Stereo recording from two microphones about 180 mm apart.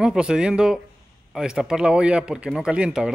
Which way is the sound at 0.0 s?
5° right (ahead or behind).